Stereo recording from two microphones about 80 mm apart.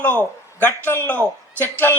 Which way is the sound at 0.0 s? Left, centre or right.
Left.